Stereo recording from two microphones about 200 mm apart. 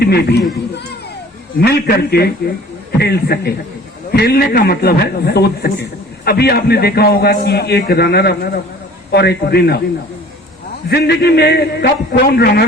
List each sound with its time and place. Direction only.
0.0 s a man's voice: 55° left (ahead or behind)
1.5 s a man's voice: 50° left (ahead or behind)
10.8 s a man's voice: 55° left (ahead or behind)